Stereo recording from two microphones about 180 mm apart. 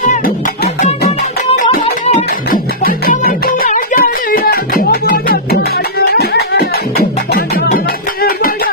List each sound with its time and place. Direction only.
1.8 s music: 35° left (ahead or behind)
2.5 s music: 50° left (ahead or behind)